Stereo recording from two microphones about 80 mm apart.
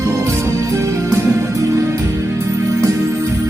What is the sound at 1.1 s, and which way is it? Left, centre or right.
Music, right.